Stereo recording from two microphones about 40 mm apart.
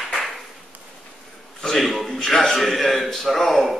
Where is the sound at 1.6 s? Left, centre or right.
Centre.